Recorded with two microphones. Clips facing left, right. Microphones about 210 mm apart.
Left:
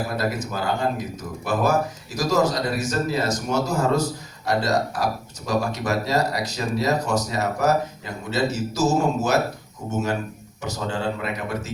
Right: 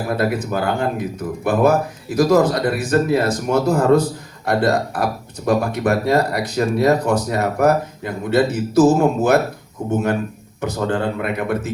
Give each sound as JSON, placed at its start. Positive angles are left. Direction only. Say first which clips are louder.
{"t": 0.2, "sound": "speech", "louder": "right 6 dB", "side_deg": -55}